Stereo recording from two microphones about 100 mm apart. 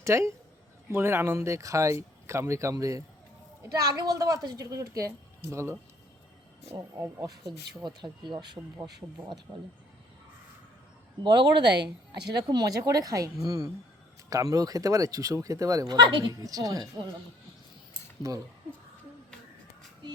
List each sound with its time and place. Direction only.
0.0 s speech: 30° right (ahead or behind)
6.7 s speech: 35° right (ahead or behind)
7.8 s speech: 50° right (ahead or behind)
9.0 s speech: 30° right (ahead or behind)
11.2 s speech: 50° right (ahead or behind); by 16.0 s 35° right (ahead or behind)
16.0 s speech: 55° right (ahead or behind)
16.3 s speech: 40° right (ahead or behind)
18.2 s speech: 35° right (ahead or behind)